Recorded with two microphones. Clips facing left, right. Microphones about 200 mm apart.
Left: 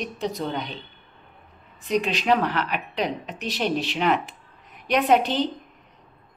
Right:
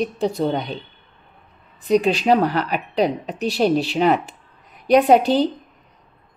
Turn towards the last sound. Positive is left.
turn(degrees=-35)  # may be behind; listen again after turning